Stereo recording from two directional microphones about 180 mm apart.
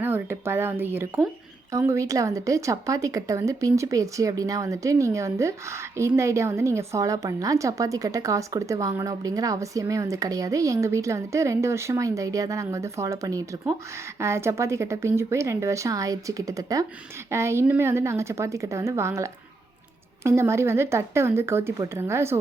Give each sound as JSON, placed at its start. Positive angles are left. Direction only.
{"t": 0.0, "sound": "a woman's voice", "side_deg": -15}